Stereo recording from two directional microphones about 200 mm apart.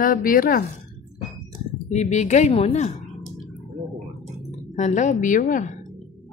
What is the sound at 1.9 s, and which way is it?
A woman's voice, 35° left (ahead or behind).